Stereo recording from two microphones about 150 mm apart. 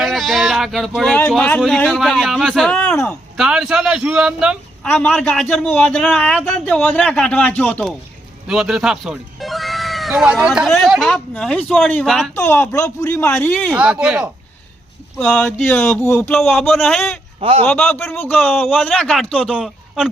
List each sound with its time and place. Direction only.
0.0 s a sound: centre (ahead or behind)
1.3 s a man's voice: 5° left (ahead or behind)
3.1 s a man's voice: centre (ahead or behind)
4.8 s a man's voice: 10° left (ahead or behind)
8.4 s a man's voice: 5° right (ahead or behind)
13.7 s a man's voice: 5° right (ahead or behind)
15.2 s a man's voice: 5° left (ahead or behind)
16.0 s speech: 20° left (ahead or behind)
16.6 s a man's voice: centre (ahead or behind)
17.4 s a man's voice: 40° right (ahead or behind)
17.7 s a man's voice: 5° left (ahead or behind)
19.5 s speech: 5° right (ahead or behind)